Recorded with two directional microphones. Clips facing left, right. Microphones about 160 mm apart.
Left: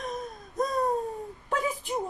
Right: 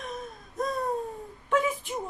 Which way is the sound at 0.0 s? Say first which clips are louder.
Left 3 dB; 40° left (ahead or behind).